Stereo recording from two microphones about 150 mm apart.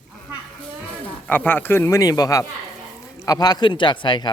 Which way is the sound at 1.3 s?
10° left (ahead or behind).